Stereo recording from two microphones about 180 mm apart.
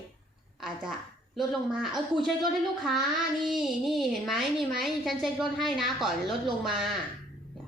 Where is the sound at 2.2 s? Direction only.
Centre (ahead or behind).